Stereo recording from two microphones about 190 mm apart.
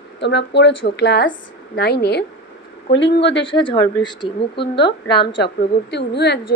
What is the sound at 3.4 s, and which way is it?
Speech, 25° left (ahead or behind).